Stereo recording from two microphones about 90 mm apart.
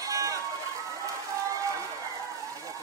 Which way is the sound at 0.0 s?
40° right (ahead or behind).